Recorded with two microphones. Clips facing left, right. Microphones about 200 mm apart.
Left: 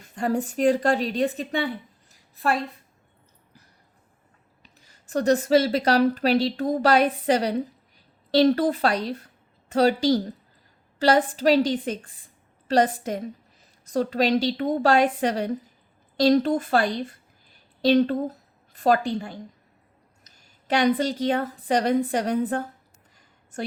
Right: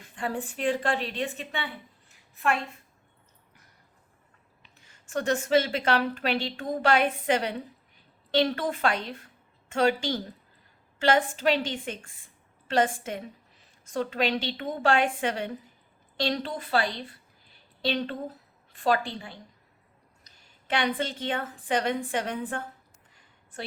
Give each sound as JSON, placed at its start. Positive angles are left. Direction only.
{"t": 0.0, "sound": "a woman's voice", "side_deg": 40}
{"t": 4.6, "sound": "a woman's voice", "side_deg": 40}
{"t": 23.1, "sound": "a sound", "side_deg": 45}